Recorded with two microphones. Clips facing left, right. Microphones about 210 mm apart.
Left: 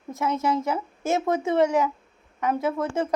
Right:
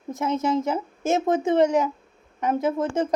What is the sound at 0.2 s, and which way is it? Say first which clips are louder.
Speech: right 1 dB; 20° right (ahead or behind).